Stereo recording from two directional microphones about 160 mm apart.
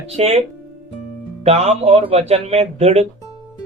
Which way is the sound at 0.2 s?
40° right (ahead or behind).